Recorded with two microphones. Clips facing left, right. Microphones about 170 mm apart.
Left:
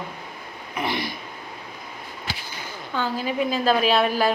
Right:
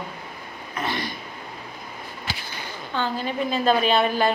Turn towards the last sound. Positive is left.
turn(degrees=5)  # may be behind; listen again after turning